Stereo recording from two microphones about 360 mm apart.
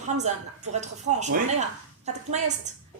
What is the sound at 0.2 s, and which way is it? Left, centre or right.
A woman's voice, centre.